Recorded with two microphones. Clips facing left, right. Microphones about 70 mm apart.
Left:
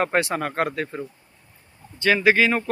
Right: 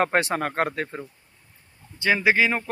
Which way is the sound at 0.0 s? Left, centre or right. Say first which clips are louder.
Even; right.